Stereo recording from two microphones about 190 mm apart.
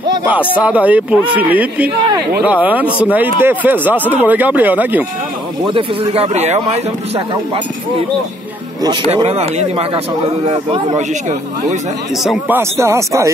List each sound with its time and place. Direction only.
0.6 s speech: 5° right (ahead or behind)
5.7 s a man's voice: 30° right (ahead or behind)
9.1 s a man's voice: 30° right (ahead or behind)
12.2 s speech: centre (ahead or behind)
12.5 s speech: 15° right (ahead or behind)